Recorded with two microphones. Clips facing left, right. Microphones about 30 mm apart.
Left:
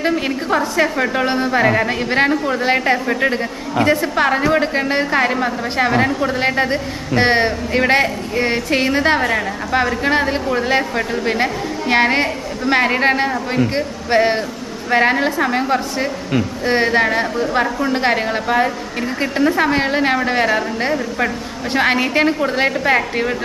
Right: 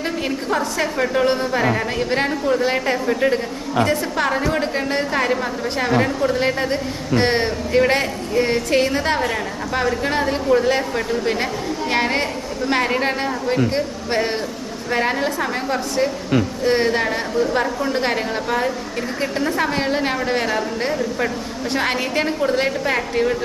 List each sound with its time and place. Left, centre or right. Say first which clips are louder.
0.5 s a woman's voice: left 5 dB; centre